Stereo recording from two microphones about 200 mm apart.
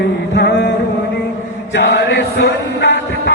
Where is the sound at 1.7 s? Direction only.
60° left (ahead or behind).